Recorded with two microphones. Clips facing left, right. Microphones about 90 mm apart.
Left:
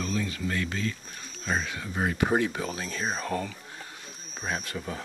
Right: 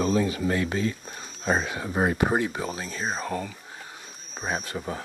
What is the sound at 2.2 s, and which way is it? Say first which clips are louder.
Speech: right 1 dB; 15° right (ahead or behind).